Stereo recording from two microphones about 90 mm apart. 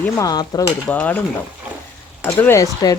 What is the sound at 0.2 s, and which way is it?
Speech, 45° left (ahead or behind).